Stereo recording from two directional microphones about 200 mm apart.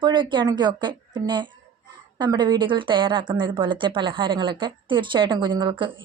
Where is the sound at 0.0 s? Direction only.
25° right (ahead or behind).